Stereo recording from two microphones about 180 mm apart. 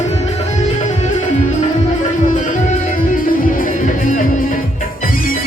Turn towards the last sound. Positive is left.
turn(degrees=45)  # may be behind; listen again after turning